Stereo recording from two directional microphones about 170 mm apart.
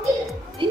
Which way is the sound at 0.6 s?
30° right (ahead or behind).